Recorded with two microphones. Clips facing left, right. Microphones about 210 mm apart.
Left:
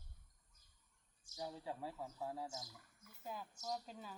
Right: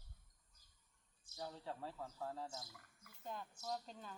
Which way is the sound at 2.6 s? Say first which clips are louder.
Left 1 dB; 60° right (ahead or behind).